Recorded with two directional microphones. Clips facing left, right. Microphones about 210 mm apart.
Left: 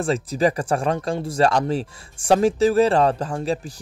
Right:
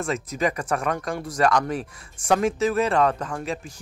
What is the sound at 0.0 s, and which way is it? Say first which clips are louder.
Speech: left 5 dB; 30° left (ahead or behind).